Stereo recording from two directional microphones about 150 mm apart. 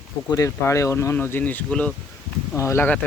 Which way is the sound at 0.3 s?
20° left (ahead or behind).